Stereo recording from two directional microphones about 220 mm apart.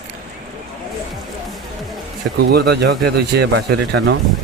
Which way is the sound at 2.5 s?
45° right (ahead or behind).